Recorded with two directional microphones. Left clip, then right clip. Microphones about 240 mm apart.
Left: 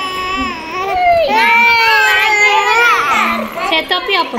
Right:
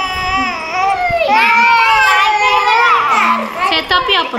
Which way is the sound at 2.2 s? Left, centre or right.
Left.